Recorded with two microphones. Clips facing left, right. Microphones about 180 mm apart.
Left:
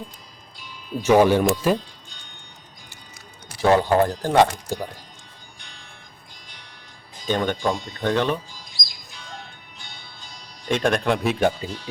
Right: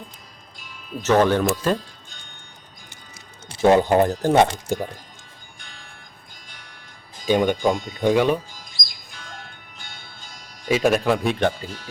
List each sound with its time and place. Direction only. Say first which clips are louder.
0.9 s speech: left 2 dB; 10° left (ahead or behind)
3.5 s speech: right 2 dB; 25° right (ahead or behind)
7.3 s speech: right 4 dB; 10° right (ahead or behind)
9.7 s music: right 1 dB; 50° right (ahead or behind)
10.7 s speech: right 2 dB; 5° right (ahead or behind)